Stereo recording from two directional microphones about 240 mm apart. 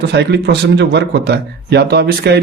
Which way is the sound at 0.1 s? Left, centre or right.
Right.